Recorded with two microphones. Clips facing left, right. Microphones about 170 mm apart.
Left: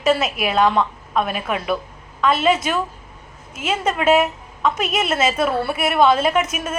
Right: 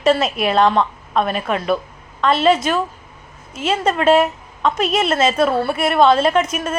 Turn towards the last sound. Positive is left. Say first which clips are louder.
# right 3 dB
turn(degrees=5)  # may be behind; listen again after turning